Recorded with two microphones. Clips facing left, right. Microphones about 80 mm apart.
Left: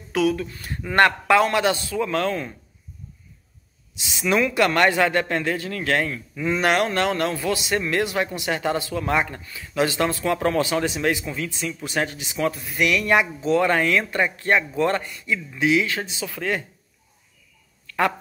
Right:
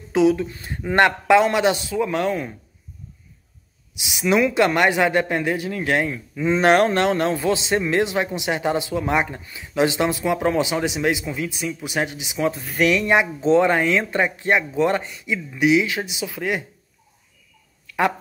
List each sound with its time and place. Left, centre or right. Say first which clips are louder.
0.1 s speech: right 4 dB; right
3.9 s speech: right 2 dB; centre
12.6 s speech: right 3 dB; right
12.9 s speech: right 1 dB; right
17.8 s a sound: right 1 dB; centre